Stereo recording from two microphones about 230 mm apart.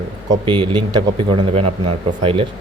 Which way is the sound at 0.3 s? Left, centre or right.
Centre.